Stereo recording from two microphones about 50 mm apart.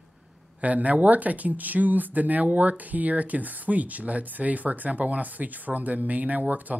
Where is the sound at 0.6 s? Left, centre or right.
Right.